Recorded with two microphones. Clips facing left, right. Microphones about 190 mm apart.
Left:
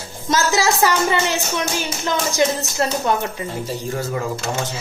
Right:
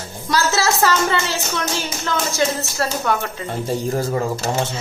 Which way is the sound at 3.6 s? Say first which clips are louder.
Right 7 dB; 35° right (ahead or behind).